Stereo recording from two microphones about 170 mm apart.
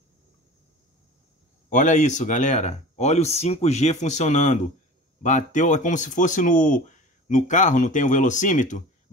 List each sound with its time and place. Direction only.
1.7 s speech: 45° left (ahead or behind)